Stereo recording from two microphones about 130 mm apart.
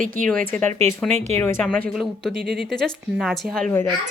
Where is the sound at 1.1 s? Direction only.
60° right (ahead or behind).